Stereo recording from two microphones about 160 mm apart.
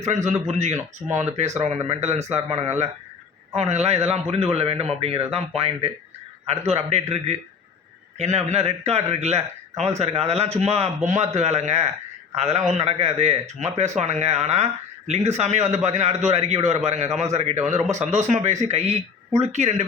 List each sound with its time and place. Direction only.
0.4 s a man's voice: 45° right (ahead or behind)